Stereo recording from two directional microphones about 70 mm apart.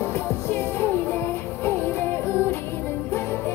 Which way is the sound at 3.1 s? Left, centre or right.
Left.